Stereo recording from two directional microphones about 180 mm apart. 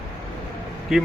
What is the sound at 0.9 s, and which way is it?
Speech, centre (ahead or behind).